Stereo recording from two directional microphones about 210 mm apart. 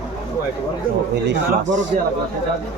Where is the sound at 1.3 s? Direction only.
60° right (ahead or behind).